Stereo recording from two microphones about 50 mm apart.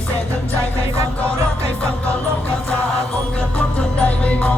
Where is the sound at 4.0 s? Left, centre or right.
Left.